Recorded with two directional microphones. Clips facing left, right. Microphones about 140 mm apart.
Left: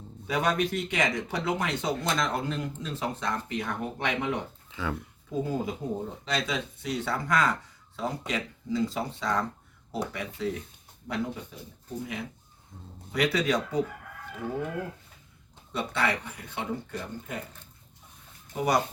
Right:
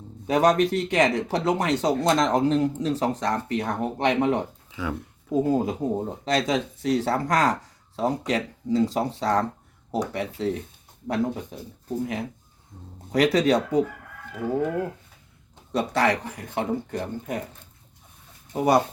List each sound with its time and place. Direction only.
0.3 s speech: 40° right (ahead or behind)
4.7 s speech: 10° right (ahead or behind)
5.3 s speech: 40° right (ahead or behind)
11.1 s speech: 45° right (ahead or behind)
15.7 s speech: 40° right (ahead or behind)
18.5 s speech: 30° right (ahead or behind)